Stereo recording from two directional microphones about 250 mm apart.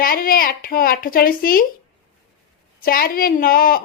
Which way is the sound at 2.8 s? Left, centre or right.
Left.